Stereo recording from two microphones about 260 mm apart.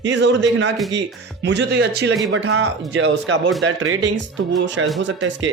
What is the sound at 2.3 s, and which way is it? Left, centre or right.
Speech, right.